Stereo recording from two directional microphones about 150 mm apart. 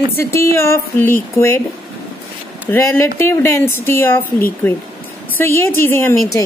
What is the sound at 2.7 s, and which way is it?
A woman's voice, 15° left (ahead or behind).